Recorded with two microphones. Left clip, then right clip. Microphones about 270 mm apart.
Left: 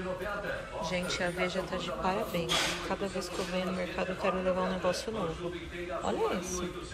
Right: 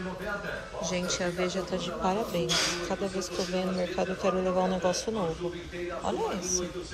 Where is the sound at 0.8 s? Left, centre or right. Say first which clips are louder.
Right 2 dB; centre.